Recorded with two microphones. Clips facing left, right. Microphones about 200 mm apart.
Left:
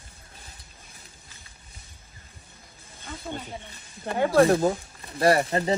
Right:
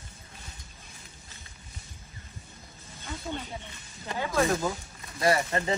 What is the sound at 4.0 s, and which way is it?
Speech, 55° left (ahead or behind).